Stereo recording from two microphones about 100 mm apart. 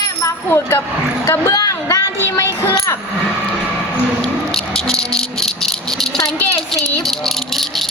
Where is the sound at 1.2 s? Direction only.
35° left (ahead or behind).